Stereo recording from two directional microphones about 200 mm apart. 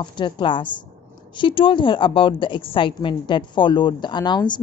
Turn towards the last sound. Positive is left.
turn(degrees=20)  # may be behind; listen again after turning